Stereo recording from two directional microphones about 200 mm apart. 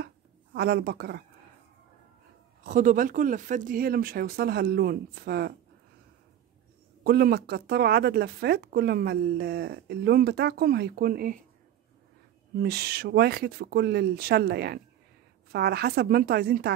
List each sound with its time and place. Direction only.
0.0 s a sound: 55° right (ahead or behind)
2.6 s speech: 40° right (ahead or behind)
7.0 s speech: 50° right (ahead or behind)
12.6 s speech: 55° right (ahead or behind)